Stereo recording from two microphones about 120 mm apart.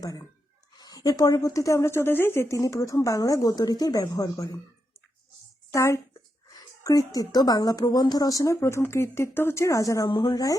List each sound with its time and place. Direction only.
0.0 s speech: 30° left (ahead or behind)
5.7 s speech: 25° left (ahead or behind)
6.5 s a sound: 30° left (ahead or behind)
7.3 s speech: 30° left (ahead or behind)